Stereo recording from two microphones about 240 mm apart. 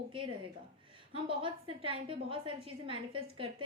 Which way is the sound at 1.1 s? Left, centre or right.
Right.